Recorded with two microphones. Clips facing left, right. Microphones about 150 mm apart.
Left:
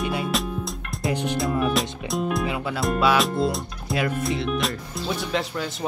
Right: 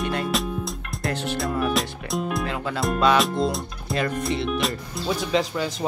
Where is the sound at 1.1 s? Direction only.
15° left (ahead or behind).